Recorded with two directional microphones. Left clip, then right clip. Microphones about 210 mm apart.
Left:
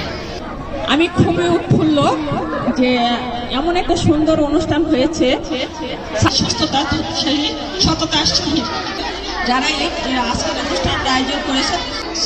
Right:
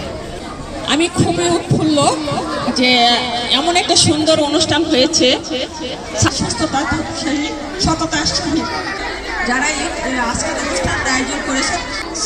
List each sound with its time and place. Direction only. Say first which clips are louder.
0.9 s a woman's voice: even; 35° left (ahead or behind)
6.3 s speech: left 2 dB; 40° left (ahead or behind)